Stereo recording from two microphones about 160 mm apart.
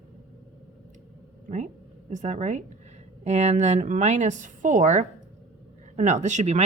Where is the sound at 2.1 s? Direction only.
50° right (ahead or behind).